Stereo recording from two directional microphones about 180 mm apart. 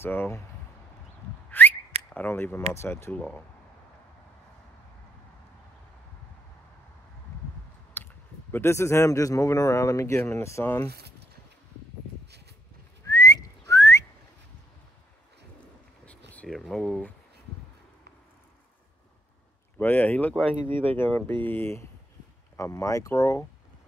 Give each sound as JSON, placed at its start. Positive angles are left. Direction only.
{"t": 0.0, "sound": "speech", "side_deg": 10}
{"t": 1.5, "sound": "whistling", "side_deg": 10}
{"t": 2.1, "sound": "speech", "side_deg": 10}
{"t": 7.9, "sound": "speech", "side_deg": 10}
{"t": 10.9, "sound": "speech", "side_deg": -65}
{"t": 13.0, "sound": "whistling", "side_deg": 20}
{"t": 16.3, "sound": "speech", "side_deg": 5}
{"t": 19.8, "sound": "speech", "side_deg": 10}
{"t": 20.6, "sound": "speech", "side_deg": -30}
{"t": 21.0, "sound": "speech", "side_deg": 10}